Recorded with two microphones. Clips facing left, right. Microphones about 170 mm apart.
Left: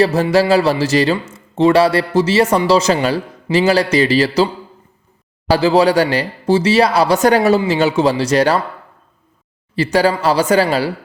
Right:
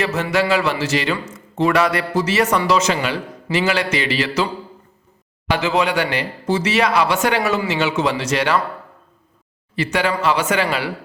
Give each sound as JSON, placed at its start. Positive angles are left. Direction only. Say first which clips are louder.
{"t": 0.0, "sound": "a man's voice", "louder": "left 6 dB", "side_deg": 35}
{"t": 5.5, "sound": "a man's voice", "louder": "left 7 dB", "side_deg": 35}
{"t": 9.7, "sound": "a man's voice", "louder": "left 6 dB", "side_deg": 35}